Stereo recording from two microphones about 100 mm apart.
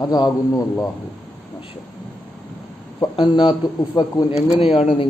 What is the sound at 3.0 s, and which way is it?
A man's voice, 50° left (ahead or behind).